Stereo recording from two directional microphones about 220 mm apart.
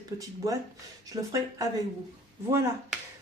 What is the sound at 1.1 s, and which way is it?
Speech, 25° right (ahead or behind).